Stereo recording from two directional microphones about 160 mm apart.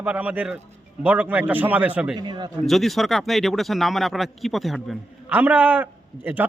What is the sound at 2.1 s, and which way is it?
Speech, 25° right (ahead or behind).